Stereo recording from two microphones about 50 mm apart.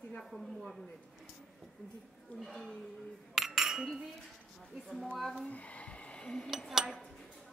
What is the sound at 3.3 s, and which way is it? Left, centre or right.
Chink, centre.